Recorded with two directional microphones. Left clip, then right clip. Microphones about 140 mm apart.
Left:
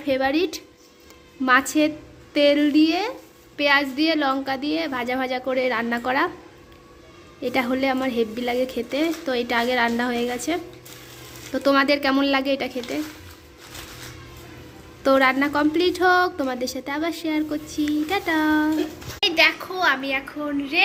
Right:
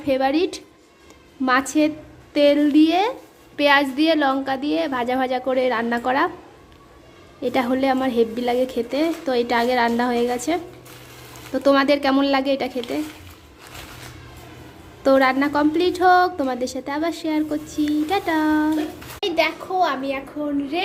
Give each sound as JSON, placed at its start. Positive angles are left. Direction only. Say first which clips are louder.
{"t": 0.0, "sound": "a woman's voice", "louder": "right 2 dB", "side_deg": -15}
{"t": 2.7, "sound": "a woman's voice", "louder": "right 3 dB", "side_deg": -25}
{"t": 7.4, "sound": "a woman's voice", "louder": "right 2 dB", "side_deg": -15}
{"t": 15.0, "sound": "a woman's voice", "louder": "right 1 dB", "side_deg": -15}